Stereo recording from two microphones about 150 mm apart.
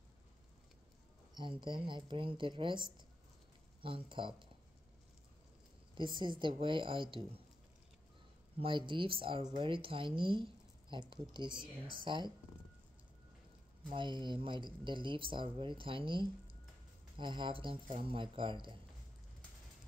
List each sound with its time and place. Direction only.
1.3 s speech: 30° right (ahead or behind)
5.9 s speech: 30° right (ahead or behind)
8.5 s speech: 35° right (ahead or behind)
13.9 s speech: 30° right (ahead or behind)